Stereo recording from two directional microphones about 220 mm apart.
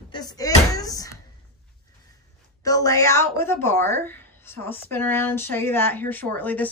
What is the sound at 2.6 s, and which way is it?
A woman's voice, 15° left (ahead or behind).